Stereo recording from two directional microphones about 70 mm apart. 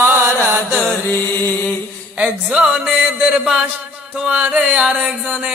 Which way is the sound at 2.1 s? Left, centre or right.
Centre.